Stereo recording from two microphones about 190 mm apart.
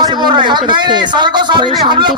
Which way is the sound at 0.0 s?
25° right (ahead or behind).